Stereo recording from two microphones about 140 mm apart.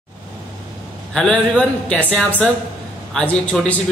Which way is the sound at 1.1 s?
5° left (ahead or behind).